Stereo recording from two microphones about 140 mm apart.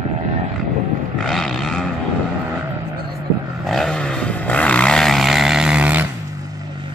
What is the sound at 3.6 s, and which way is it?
Vehicle, 5° left (ahead or behind).